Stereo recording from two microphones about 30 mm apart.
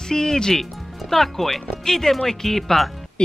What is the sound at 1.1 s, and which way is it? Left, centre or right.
Speech, centre.